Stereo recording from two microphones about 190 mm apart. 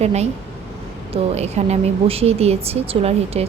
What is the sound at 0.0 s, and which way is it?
A woman's voice, 35° right (ahead or behind).